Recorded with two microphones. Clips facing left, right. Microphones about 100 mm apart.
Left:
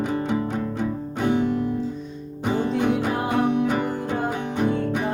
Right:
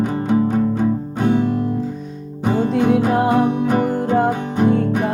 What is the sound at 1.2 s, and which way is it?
Music, 45° right (ahead or behind).